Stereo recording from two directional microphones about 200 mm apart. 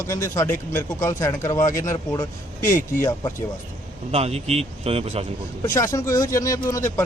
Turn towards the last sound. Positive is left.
turn(degrees=15)  # may be behind; listen again after turning